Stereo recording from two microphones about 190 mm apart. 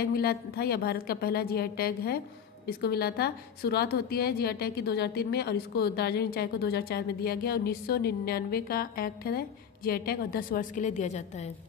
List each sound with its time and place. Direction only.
0.0 s a woman's voice: 55° left (ahead or behind); by 11.4 s 40° left (ahead or behind)